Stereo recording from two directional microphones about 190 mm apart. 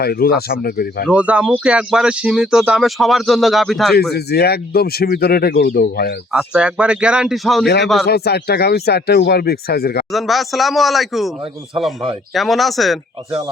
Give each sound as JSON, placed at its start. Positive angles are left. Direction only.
{"t": 0.0, "sound": "speech", "side_deg": 55}
{"t": 1.0, "sound": "speech", "side_deg": -5}
{"t": 4.1, "sound": "speech", "side_deg": 60}
{"t": 6.3, "sound": "speech", "side_deg": -5}
{"t": 8.0, "sound": "speech", "side_deg": 55}
{"t": 10.1, "sound": "speech", "side_deg": 0}
{"t": 12.3, "sound": "speech", "side_deg": 0}